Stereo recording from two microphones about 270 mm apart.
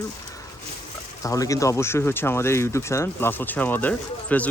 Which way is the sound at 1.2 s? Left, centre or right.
Centre.